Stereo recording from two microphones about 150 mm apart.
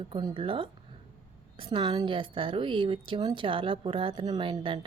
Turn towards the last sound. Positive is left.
turn(degrees=-35)  # may be behind; listen again after turning